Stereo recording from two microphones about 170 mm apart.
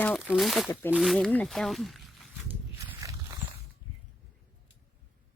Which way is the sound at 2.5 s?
10° right (ahead or behind).